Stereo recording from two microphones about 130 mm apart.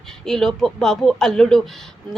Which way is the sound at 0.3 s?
5° left (ahead or behind).